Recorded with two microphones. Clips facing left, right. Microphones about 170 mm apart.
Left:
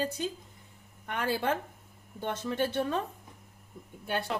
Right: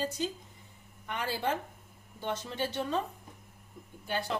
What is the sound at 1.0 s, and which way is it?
A woman's voice, 55° left (ahead or behind).